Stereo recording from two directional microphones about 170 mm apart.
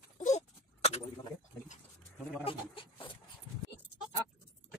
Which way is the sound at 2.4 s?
30° left (ahead or behind).